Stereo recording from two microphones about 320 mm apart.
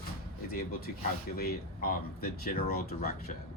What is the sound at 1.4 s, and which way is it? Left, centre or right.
Speech, left.